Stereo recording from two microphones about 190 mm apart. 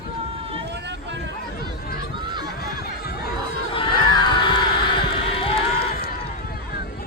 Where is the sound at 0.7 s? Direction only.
65° right (ahead or behind).